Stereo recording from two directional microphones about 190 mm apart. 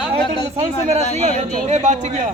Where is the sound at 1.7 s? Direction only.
35° right (ahead or behind).